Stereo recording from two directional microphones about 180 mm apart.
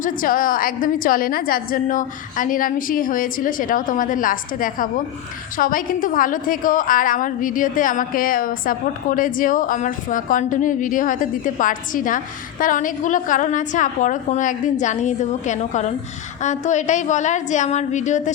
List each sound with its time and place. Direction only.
0.0 s a woman's voice: 50° left (ahead or behind)